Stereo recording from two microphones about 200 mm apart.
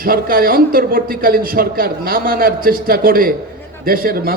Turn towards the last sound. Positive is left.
turn(degrees=-45)  # may be behind; listen again after turning